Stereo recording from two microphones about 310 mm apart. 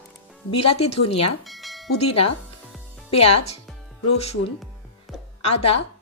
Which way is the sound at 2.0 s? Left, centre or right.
Left.